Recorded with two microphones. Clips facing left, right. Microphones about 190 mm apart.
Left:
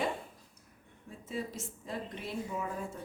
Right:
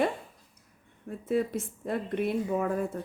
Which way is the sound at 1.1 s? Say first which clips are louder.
Right 11 dB; 60° right (ahead or behind).